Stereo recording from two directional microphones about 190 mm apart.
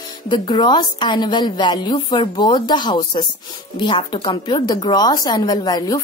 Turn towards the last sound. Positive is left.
turn(degrees=20)  # may be behind; listen again after turning